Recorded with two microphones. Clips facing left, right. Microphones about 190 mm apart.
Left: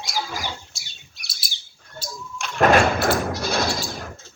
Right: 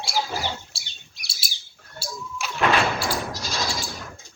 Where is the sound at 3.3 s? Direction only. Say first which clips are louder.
Left 6 dB; 60° left (ahead or behind).